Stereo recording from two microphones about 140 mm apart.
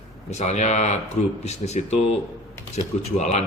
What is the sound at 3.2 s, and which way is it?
Speech, 55° left (ahead or behind).